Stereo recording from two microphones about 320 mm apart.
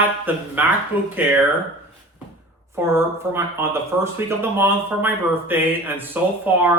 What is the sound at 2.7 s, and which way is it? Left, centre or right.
Speech, centre.